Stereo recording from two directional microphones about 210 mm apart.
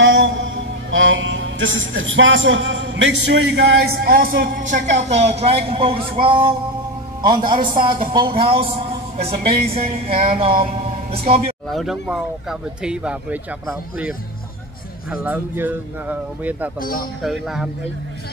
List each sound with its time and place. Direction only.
0.0 s mantra: 60° right (ahead or behind)
0.9 s a man's voice: 65° right (ahead or behind); by 8.6 s 25° right (ahead or behind)
9.8 s speech: 25° right (ahead or behind)
11.7 s a man's voice: centre (ahead or behind)